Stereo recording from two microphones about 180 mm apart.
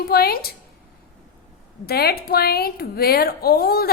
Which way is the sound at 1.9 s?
60° left (ahead or behind).